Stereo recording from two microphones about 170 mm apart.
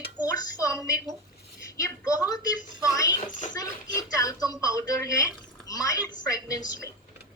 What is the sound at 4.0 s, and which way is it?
A woman's voice, 20° left (ahead or behind).